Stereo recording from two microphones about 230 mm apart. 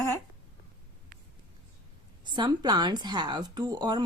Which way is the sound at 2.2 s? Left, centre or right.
Centre.